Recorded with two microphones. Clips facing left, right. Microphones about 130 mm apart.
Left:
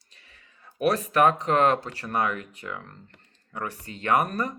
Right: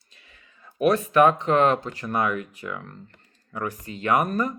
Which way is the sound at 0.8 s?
35° left (ahead or behind).